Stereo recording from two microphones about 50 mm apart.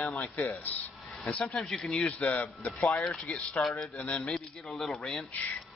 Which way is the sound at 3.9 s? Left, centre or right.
Left.